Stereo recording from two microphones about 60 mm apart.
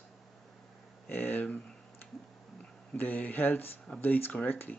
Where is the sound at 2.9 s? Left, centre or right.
Left.